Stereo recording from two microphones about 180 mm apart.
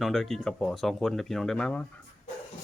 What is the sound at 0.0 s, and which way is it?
Speech, centre (ahead or behind).